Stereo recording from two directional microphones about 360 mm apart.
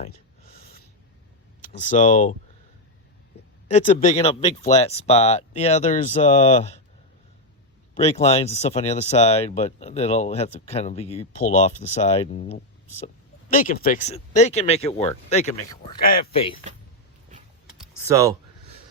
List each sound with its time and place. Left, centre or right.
1.6 s speech: left
3.7 s speech: centre
7.9 s speech: centre
17.7 s typing: centre